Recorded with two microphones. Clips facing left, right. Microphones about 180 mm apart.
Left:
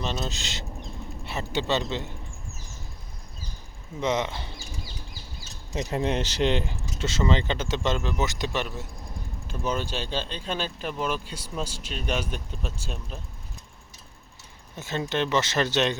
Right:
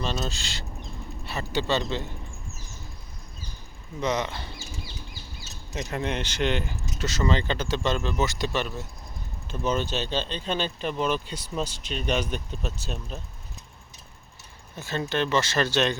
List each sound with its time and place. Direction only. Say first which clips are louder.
0.0 s speech: right 1 dB; 20° left (ahead or behind)
4.0 s speech: left 1 dB; 20° left (ahead or behind)
5.8 s speech: left 3 dB; 30° left (ahead or behind); by 13.0 s 10° left (ahead or behind)
14.8 s speech: even; 20° left (ahead or behind)